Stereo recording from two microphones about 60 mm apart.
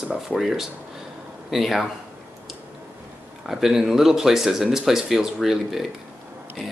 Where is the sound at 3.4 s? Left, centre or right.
Centre.